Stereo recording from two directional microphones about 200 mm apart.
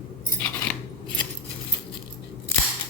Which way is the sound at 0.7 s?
5° left (ahead or behind).